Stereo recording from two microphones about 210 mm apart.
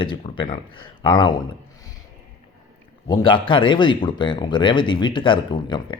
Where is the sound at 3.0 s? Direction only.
20° left (ahead or behind).